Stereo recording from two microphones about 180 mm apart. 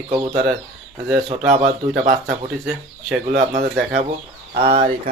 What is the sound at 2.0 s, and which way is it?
Speech, 45° right (ahead or behind).